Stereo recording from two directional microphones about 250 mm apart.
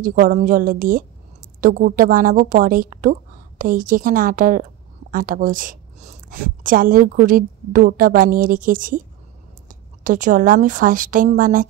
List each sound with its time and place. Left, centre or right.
0.0 s a woman's voice: right